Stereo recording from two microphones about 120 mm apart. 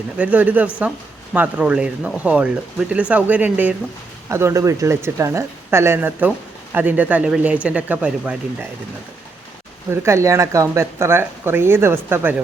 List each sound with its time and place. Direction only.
0.2 s speech: 10° right (ahead or behind)
4.3 s speech: 25° right (ahead or behind)
9.9 s speech: 20° right (ahead or behind)